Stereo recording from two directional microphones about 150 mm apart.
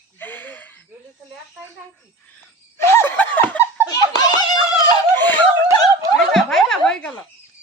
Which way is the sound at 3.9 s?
25° left (ahead or behind).